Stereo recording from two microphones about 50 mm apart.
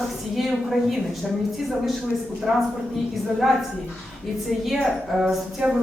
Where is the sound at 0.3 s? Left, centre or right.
Centre.